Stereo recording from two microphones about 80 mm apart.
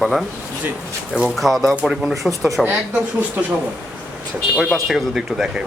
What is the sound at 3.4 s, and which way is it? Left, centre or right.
Speech, right.